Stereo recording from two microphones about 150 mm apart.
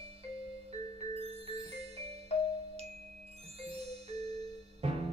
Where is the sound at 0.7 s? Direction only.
45° right (ahead or behind).